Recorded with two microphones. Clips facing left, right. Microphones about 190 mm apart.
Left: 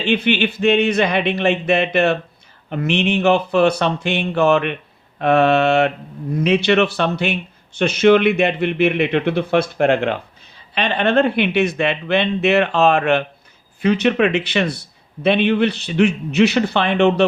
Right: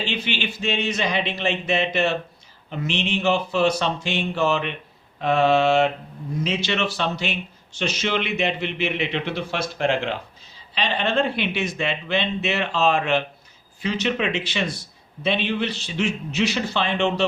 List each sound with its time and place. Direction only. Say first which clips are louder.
0.0 s a man's voice: left 9 dB; 60° left (ahead or behind)